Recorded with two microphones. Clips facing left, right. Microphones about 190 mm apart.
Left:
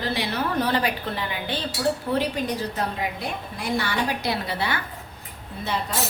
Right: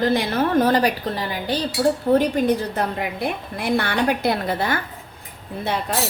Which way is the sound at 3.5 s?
60° right (ahead or behind).